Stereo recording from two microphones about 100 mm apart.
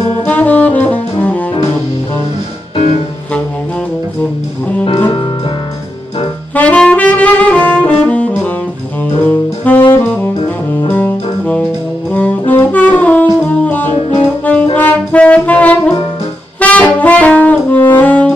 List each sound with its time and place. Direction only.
0.2 s saxophone: 15° left (ahead or behind)
6.5 s saxophone: 15° left (ahead or behind)
10.9 s brass instrument: 20° left (ahead or behind)
13.4 s music: 15° left (ahead or behind)
14.2 s saxophone: 15° left (ahead or behind)
14.8 s music: 15° left (ahead or behind)
16.5 s saxophone: 15° left (ahead or behind)